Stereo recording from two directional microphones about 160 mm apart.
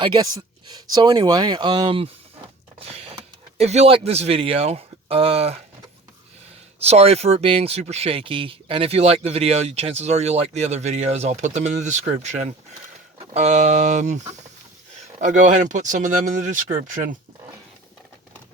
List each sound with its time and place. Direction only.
0.0 s speech: 30° right (ahead or behind)
6.7 s speech: 40° right (ahead or behind)